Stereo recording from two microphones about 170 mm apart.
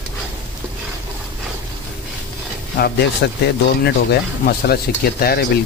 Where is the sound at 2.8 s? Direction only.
65° left (ahead or behind).